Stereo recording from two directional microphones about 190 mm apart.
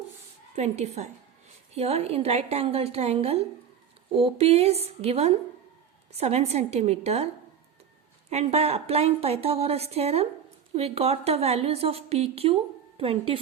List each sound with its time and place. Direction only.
0.5 s a woman's voice: 35° right (ahead or behind)
8.3 s a woman's voice: 35° right (ahead or behind)